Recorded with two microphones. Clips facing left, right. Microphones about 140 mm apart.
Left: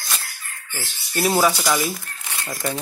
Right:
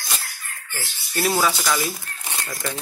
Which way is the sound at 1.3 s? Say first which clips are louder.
Left 3 dB; 15° left (ahead or behind).